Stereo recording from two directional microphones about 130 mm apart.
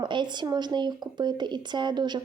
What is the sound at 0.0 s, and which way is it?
Speech, 35° right (ahead or behind).